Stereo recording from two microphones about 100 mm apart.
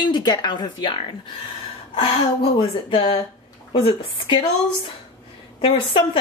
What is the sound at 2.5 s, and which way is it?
A woman's voice, 65° left (ahead or behind).